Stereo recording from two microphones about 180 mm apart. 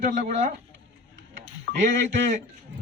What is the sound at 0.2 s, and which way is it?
Speech, 45° right (ahead or behind).